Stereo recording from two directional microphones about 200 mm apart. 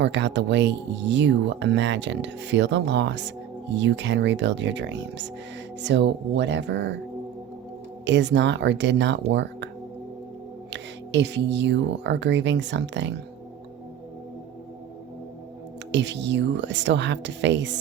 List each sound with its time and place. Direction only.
0.0 s speech: 60° right (ahead or behind)
8.0 s speech: 60° right (ahead or behind)
10.7 s speech: 60° right (ahead or behind)
15.9 s speech: 60° right (ahead or behind)